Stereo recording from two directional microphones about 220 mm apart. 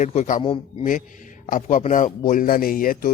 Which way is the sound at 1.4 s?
35° left (ahead or behind).